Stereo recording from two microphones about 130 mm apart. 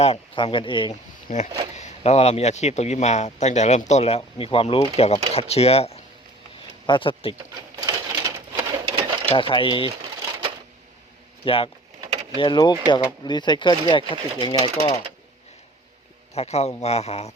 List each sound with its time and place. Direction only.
0.0 s speech: 50° left (ahead or behind)
1.3 s speech: 80° left
1.7 s speech: 60° left (ahead or behind)
6.8 s speech: 40° left (ahead or behind)
7.8 s bird: 30° right (ahead or behind)
8.9 s sewing machine: 35° right (ahead or behind)
9.3 s speech: 40° left (ahead or behind)
11.4 s speech: 45° left (ahead or behind)
16.3 s speech: 55° left (ahead or behind)